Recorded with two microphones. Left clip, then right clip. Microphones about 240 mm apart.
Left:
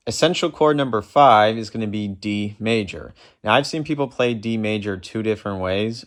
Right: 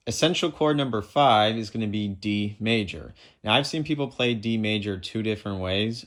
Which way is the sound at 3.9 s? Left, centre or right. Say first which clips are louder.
Left 6 dB; centre.